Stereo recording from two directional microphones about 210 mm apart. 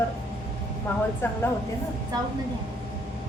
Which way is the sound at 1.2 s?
10° left (ahead or behind).